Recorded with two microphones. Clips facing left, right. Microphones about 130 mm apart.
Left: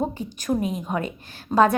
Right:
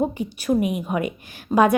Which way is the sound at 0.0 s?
10° right (ahead or behind).